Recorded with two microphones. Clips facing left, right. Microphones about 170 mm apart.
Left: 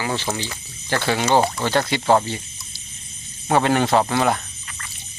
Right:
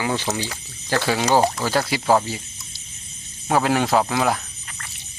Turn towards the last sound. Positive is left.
turn(degrees=0)  # may be behind; listen again after turning